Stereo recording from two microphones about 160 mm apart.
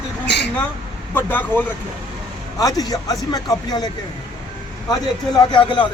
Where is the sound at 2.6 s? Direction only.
25° left (ahead or behind).